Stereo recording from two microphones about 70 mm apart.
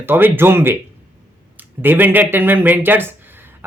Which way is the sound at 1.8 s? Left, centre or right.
Right.